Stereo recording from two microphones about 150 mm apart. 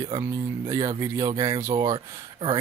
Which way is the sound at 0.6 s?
25° right (ahead or behind).